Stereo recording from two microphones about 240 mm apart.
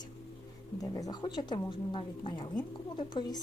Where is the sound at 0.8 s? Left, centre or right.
Centre.